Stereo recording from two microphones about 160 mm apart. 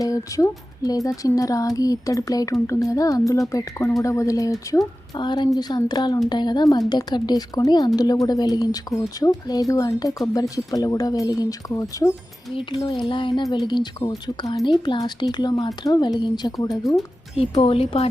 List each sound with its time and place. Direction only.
0.0 s speech: 20° left (ahead or behind)
17.3 s speech: 35° left (ahead or behind)